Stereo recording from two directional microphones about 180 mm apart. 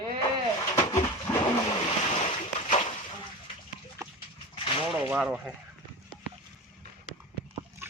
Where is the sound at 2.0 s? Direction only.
35° left (ahead or behind).